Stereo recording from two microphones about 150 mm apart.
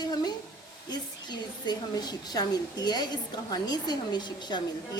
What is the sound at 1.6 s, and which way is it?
A woman's voice, 25° left (ahead or behind).